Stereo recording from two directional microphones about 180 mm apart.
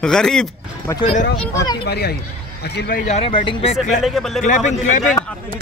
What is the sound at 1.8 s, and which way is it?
Speech, 60° left (ahead or behind).